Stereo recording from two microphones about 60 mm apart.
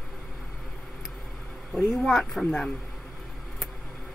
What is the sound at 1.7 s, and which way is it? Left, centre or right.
Speech, left.